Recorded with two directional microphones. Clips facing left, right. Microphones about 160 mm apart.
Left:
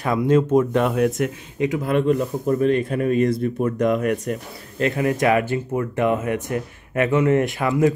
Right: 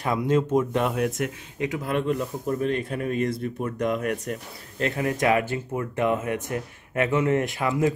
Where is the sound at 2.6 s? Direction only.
65° left (ahead or behind).